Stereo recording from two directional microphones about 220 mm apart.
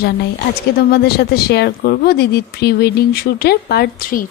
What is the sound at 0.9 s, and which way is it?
Speech, 45° left (ahead or behind).